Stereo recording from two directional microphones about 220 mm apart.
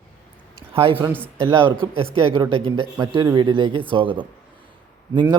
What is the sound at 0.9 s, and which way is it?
Speech, 10° right (ahead or behind).